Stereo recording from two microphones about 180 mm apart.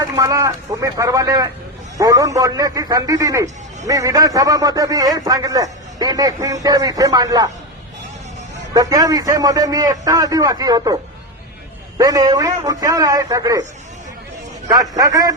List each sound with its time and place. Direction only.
0.0 s a man's voice: 20° right (ahead or behind)
8.7 s a man's voice: 20° right (ahead or behind)
11.9 s a man's voice: 20° right (ahead or behind)
14.7 s a man's voice: 20° right (ahead or behind)